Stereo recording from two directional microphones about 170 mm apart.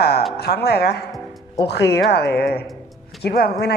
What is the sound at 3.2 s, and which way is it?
Speech, 65° left (ahead or behind).